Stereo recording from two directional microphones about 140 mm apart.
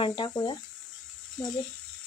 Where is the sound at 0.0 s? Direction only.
35° left (ahead or behind).